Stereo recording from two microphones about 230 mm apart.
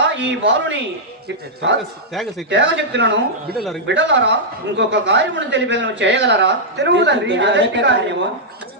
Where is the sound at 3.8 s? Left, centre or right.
Right.